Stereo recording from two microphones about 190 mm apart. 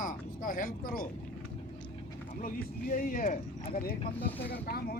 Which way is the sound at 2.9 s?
45° left (ahead or behind).